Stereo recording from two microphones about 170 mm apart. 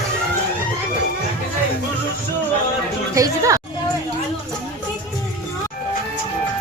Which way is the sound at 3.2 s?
20° right (ahead or behind).